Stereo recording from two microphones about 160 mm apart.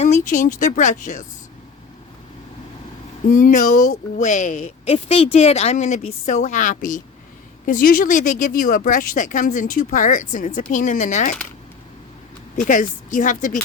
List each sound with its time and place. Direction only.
0.0 s speech: 50° left (ahead or behind)
3.3 s a woman's voice: 55° left (ahead or behind)
12.5 s a woman's voice: 55° left (ahead or behind)